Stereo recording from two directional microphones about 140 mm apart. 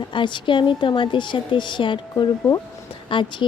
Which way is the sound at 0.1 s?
35° left (ahead or behind).